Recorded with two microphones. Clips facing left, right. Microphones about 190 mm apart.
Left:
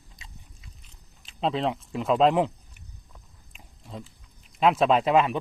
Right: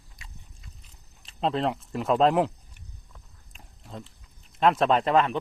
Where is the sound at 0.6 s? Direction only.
Centre (ahead or behind).